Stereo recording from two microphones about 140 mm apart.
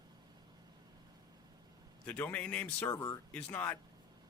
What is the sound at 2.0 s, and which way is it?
Speech, 10° left (ahead or behind).